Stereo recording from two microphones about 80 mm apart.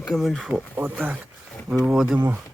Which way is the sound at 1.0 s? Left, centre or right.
Centre.